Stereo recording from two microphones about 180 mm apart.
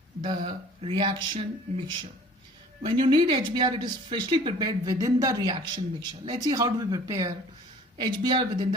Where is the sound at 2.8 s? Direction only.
25° right (ahead or behind).